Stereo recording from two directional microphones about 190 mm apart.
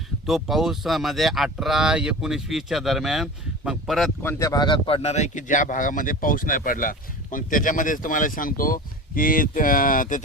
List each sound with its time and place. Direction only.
0.3 s speech: centre (ahead or behind)
4.2 s speech: 15° left (ahead or behind); by 10.2 s 45° left (ahead or behind)